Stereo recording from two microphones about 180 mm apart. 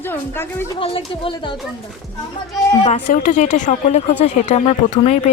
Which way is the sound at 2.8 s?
45° left (ahead or behind).